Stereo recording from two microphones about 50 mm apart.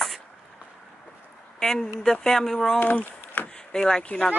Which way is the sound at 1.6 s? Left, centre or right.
Centre.